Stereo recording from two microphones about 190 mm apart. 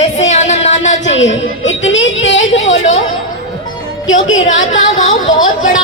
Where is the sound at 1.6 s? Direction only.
80° left.